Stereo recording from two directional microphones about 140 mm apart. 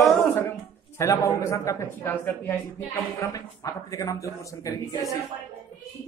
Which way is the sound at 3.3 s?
25° left (ahead or behind).